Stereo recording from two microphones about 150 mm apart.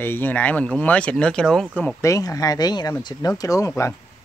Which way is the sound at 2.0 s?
20° left (ahead or behind).